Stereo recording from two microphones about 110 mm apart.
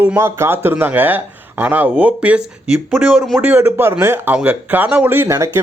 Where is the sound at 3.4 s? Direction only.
20° right (ahead or behind).